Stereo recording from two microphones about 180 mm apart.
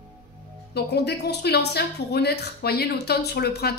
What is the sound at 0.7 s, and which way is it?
Speech, 65° left (ahead or behind).